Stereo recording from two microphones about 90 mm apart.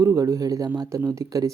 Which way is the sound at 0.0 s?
35° right (ahead or behind).